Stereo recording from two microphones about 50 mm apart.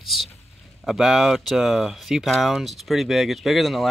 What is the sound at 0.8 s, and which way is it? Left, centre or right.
Speech, centre.